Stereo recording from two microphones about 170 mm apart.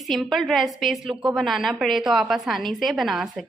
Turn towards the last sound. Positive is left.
turn(degrees=0)  # may be behind; listen again after turning